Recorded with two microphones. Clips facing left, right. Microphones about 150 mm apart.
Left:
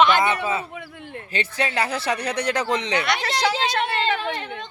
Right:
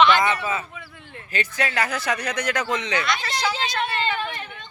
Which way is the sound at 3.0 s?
70° left (ahead or behind).